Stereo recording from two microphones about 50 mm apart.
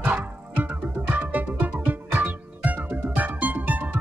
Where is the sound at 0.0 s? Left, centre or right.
Right.